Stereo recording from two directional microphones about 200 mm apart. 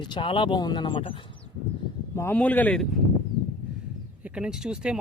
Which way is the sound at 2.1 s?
10° left (ahead or behind).